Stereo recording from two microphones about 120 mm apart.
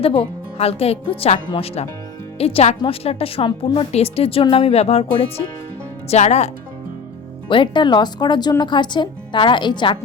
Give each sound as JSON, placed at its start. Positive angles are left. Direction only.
{"t": 0.0, "sound": "a woman's voice", "side_deg": 50}
{"t": 6.1, "sound": "speech", "side_deg": 70}
{"t": 7.4, "sound": "speech", "side_deg": 45}